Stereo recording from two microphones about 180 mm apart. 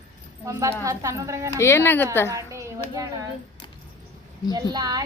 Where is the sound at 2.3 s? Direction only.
15° right (ahead or behind).